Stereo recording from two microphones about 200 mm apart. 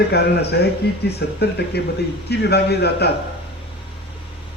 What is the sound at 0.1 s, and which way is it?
Speech, 55° left (ahead or behind).